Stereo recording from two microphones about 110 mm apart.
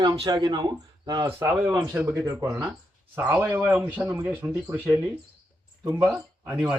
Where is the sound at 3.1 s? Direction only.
15° right (ahead or behind).